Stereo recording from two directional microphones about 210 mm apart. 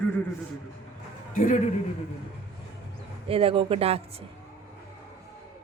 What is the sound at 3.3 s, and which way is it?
Speech, 25° right (ahead or behind).